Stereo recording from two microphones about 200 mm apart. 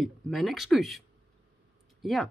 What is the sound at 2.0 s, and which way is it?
Speech, centre (ahead or behind).